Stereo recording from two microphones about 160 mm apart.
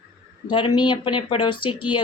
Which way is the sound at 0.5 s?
30° left (ahead or behind).